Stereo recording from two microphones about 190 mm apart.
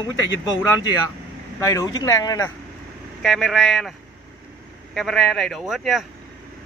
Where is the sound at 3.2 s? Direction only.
Centre (ahead or behind).